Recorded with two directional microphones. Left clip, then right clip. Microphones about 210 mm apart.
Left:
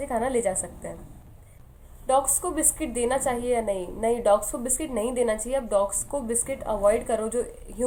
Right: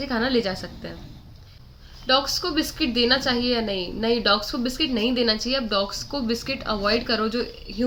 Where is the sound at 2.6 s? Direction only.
20° right (ahead or behind).